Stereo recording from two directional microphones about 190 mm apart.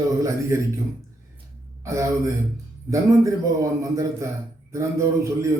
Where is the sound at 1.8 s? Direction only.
15° right (ahead or behind).